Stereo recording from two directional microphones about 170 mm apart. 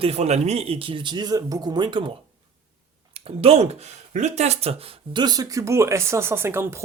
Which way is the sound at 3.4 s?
35° right (ahead or behind).